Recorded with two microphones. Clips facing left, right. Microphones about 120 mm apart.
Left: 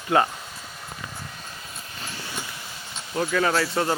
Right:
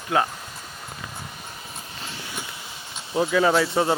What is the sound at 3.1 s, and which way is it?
Speech, 15° right (ahead or behind).